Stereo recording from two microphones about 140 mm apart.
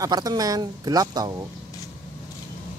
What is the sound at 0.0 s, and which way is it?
Speech, 25° right (ahead or behind).